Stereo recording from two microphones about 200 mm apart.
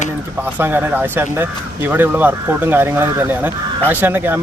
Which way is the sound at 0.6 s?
10° right (ahead or behind).